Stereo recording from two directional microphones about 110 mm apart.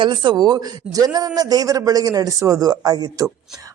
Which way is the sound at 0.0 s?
45° right (ahead or behind).